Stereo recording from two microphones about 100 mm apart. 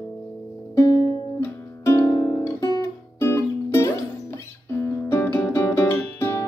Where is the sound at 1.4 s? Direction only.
30° left (ahead or behind).